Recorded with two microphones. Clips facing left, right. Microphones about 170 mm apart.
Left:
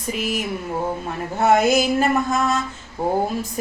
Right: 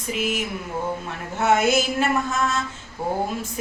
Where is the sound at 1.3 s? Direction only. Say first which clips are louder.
Left 3 dB; 35° left (ahead or behind).